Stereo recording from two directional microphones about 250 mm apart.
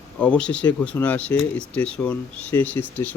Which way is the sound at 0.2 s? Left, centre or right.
Centre.